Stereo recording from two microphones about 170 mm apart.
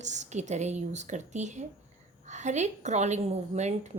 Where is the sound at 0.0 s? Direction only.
45° right (ahead or behind).